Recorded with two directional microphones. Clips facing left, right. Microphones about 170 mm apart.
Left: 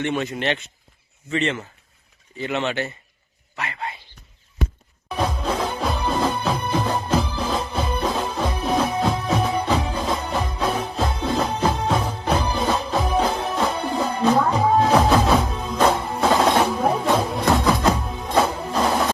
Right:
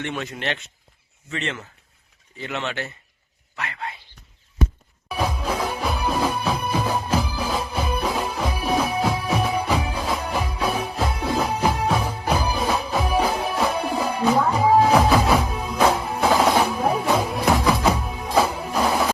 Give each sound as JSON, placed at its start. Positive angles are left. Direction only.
{"t": 0.0, "sound": "speech", "side_deg": 0}
{"t": 5.0, "sound": "music", "side_deg": -10}